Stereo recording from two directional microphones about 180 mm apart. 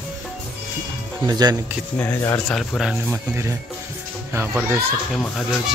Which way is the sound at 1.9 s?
10° left (ahead or behind).